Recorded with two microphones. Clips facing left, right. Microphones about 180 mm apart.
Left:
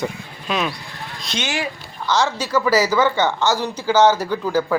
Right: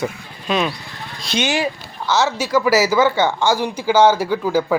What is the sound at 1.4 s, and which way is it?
Speech, 20° right (ahead or behind).